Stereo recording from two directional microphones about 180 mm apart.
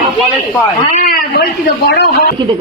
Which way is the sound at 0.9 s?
55° left (ahead or behind).